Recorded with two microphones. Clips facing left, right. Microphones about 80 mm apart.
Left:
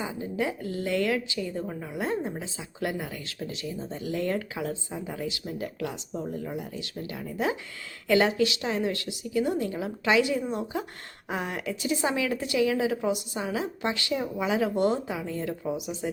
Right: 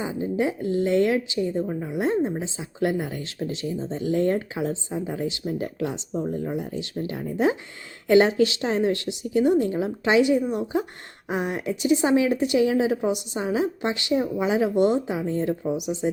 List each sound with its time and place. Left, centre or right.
0.0 s a woman's voice: right
15.6 s speech: right